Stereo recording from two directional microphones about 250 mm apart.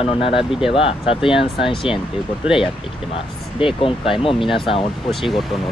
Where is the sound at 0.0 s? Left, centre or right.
Left.